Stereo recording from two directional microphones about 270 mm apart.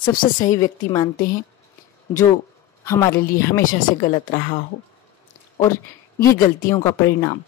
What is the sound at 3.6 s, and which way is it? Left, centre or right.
Speech, left.